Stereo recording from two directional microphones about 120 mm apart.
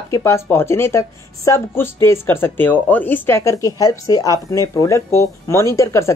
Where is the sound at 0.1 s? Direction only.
20° left (ahead or behind).